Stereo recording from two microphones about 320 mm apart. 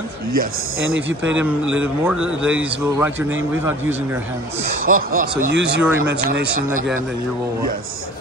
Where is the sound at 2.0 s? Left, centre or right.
Centre.